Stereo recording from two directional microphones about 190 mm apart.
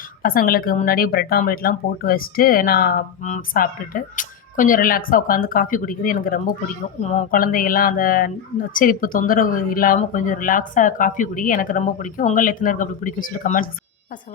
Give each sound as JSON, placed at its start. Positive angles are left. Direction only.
{"t": 0.2, "sound": "speech", "side_deg": 50}
{"t": 7.0, "sound": "speech", "side_deg": 35}